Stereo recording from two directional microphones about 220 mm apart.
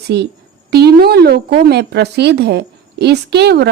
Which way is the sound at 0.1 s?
50° right (ahead or behind).